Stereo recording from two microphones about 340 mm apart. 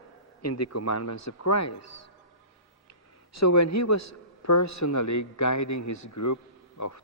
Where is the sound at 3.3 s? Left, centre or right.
Left.